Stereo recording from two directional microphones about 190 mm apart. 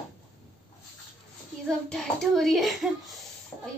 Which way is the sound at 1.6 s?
Centre (ahead or behind).